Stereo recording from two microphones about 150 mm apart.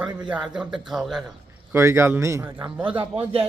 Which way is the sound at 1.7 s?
15° right (ahead or behind).